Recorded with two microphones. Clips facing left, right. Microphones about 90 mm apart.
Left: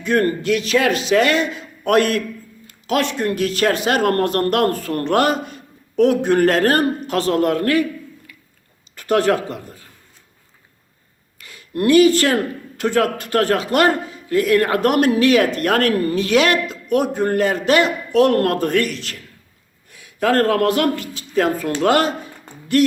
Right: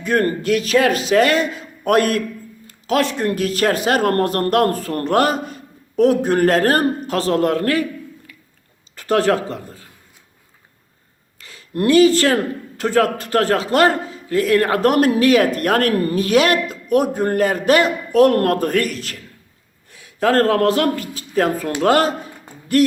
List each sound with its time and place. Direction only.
0.0 s a man's voice: 35° right (ahead or behind)
9.0 s a man's voice: 30° right (ahead or behind)
11.3 s a man's voice: 30° right (ahead or behind)